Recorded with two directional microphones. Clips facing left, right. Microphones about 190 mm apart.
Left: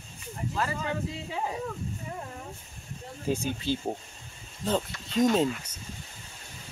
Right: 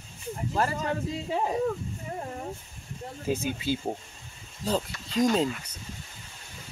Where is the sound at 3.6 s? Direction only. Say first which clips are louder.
Right 1 dB; 10° right (ahead or behind).